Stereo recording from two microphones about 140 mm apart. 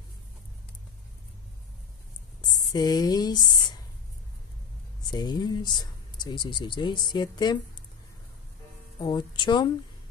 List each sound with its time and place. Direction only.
2.7 s speech: 30° left (ahead or behind)
5.1 s speech: 30° left (ahead or behind)
9.0 s speech: 35° left (ahead or behind)